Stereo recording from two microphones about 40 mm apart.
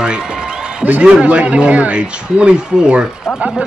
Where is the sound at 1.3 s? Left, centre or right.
Right.